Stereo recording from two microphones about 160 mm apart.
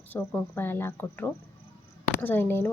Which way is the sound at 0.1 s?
15° left (ahead or behind).